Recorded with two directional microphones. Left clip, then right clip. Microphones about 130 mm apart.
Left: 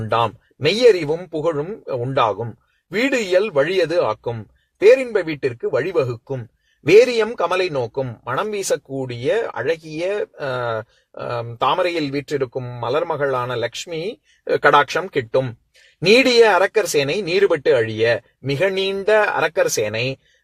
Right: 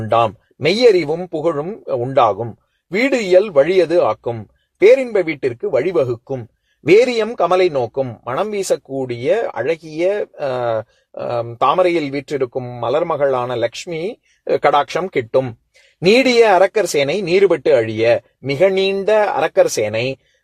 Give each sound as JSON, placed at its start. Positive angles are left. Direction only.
{"t": 0.0, "sound": "a man's voice", "side_deg": -45}